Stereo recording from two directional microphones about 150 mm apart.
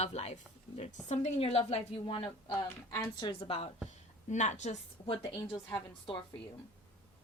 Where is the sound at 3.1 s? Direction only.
35° left (ahead or behind).